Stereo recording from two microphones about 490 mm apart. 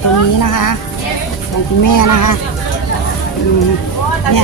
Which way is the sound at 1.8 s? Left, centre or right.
Left.